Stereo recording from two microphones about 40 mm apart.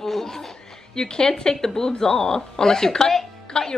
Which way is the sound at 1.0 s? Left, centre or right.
Centre.